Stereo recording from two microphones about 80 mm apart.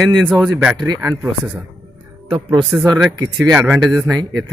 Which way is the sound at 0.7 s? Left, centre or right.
Right.